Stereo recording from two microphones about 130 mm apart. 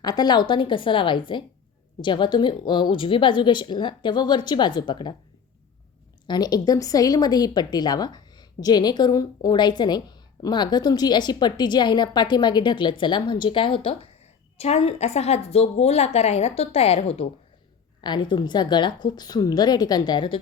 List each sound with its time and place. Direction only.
0.0 s a woman's voice: 30° left (ahead or behind)
6.2 s a woman's voice: 30° left (ahead or behind)
14.6 s a woman's voice: 55° left (ahead or behind)
18.0 s a woman's voice: 35° left (ahead or behind)